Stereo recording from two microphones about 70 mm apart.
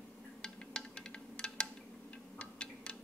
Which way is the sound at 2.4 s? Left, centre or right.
Centre.